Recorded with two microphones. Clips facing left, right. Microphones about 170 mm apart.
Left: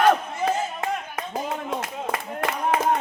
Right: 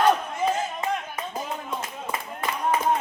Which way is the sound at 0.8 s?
75° left (ahead or behind).